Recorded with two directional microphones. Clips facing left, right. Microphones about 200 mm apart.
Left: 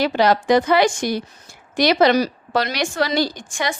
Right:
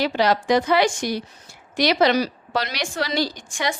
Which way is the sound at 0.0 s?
50° left (ahead or behind).